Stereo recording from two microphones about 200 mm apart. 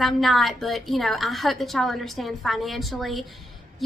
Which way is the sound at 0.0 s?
Centre (ahead or behind).